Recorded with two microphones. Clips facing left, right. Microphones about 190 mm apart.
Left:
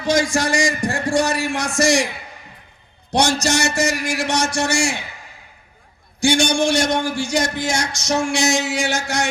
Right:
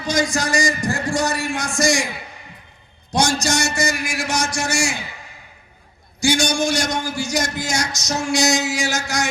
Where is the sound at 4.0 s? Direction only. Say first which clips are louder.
Left 3 dB; 35° left (ahead or behind).